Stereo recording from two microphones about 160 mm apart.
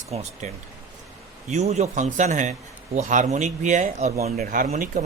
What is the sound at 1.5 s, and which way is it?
Speech, 45° right (ahead or behind).